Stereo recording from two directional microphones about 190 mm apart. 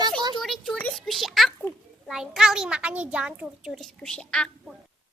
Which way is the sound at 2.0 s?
Centre (ahead or behind).